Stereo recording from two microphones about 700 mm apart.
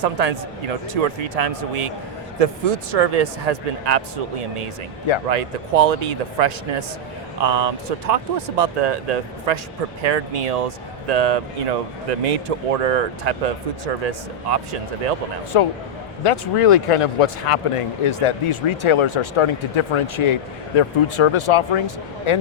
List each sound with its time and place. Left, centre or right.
0.0 s speech: right
15.5 s speech: left